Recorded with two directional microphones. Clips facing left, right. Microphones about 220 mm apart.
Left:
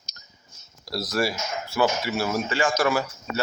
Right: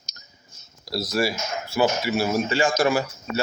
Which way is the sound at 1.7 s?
10° right (ahead or behind).